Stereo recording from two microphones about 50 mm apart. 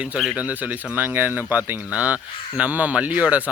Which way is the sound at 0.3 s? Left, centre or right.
Right.